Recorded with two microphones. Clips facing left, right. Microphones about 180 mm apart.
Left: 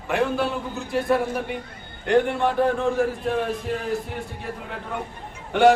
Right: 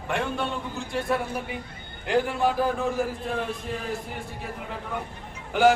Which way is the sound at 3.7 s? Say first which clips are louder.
Left 5 dB; 70° left (ahead or behind).